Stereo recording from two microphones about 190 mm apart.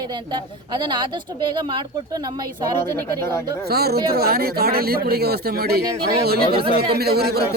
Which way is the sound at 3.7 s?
55° right (ahead or behind).